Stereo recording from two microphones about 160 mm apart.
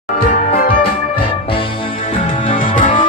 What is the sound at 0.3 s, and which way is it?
Music, 50° left (ahead or behind).